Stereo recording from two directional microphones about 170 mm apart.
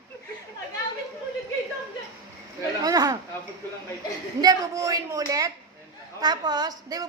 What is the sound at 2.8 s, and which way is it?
Speech, 20° right (ahead or behind).